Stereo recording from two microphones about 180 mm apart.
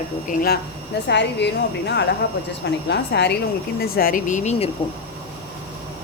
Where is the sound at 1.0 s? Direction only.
70° left (ahead or behind).